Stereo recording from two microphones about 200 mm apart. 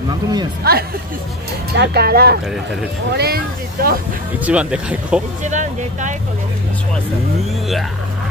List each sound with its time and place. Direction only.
0.7 s speech: 50° right (ahead or behind)
4.4 s speech: 5° right (ahead or behind)
5.4 s speech: 35° right (ahead or behind)